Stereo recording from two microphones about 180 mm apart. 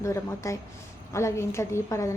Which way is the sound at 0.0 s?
15° left (ahead or behind).